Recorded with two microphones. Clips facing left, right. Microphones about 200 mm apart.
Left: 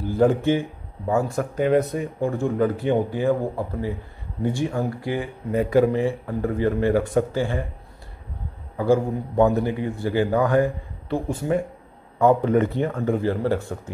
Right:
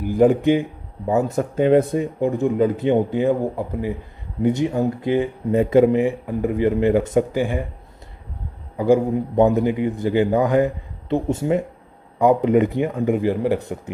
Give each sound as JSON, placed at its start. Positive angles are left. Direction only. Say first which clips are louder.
{"t": 0.0, "sound": "a man's voice", "louder": "right 4 dB", "side_deg": -15}
{"t": 8.7, "sound": "a man's voice", "louder": "right 3 dB", "side_deg": -20}